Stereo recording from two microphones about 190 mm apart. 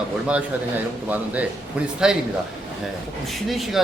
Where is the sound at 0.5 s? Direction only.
10° right (ahead or behind).